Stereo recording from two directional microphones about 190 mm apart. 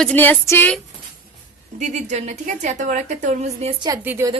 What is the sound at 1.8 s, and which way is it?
A woman's voice, 40° right (ahead or behind).